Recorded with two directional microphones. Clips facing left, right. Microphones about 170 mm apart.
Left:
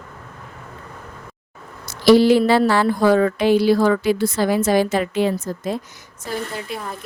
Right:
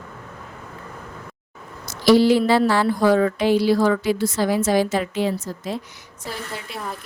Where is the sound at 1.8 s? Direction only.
60° left (ahead or behind).